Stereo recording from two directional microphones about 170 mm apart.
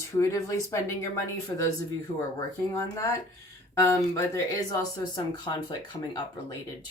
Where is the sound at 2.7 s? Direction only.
20° left (ahead or behind).